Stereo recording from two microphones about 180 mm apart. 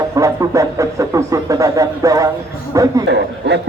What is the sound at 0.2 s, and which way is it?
A man's voice, 20° right (ahead or behind).